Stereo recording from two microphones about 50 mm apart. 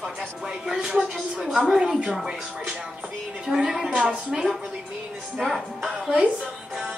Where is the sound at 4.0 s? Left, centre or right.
Centre.